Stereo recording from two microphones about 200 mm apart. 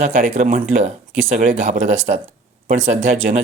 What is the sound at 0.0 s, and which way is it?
Speech, 40° right (ahead or behind).